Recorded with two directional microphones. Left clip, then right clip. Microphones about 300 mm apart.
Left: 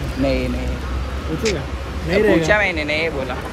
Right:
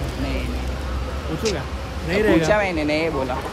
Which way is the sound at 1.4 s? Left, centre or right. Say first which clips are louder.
Left 3 dB; centre.